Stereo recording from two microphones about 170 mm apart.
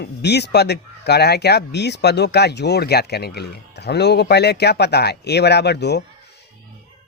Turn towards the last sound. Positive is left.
turn(degrees=80)